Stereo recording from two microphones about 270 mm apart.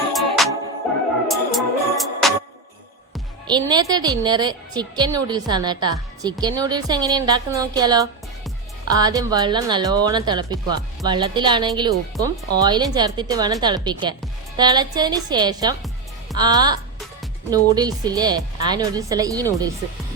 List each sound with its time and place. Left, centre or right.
0.1 s music: centre
3.4 s a woman's voice: centre